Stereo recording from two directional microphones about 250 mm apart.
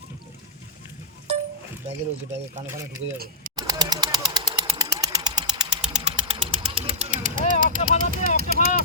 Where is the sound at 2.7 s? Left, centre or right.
Centre.